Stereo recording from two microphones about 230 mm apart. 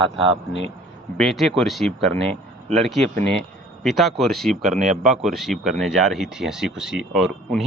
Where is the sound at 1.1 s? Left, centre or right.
Centre.